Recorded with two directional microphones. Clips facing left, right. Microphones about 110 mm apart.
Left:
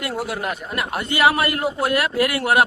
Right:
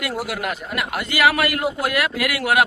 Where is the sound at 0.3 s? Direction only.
30° left (ahead or behind).